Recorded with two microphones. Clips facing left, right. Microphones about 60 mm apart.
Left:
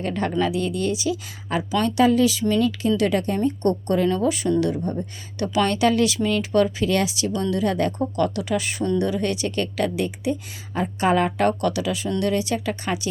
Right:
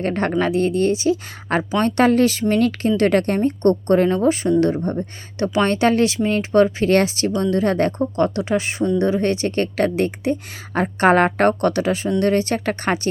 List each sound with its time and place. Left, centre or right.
0.0 s speech: right
5.4 s speech: right